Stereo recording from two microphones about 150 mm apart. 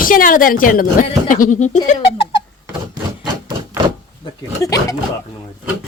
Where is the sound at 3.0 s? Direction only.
30° right (ahead or behind).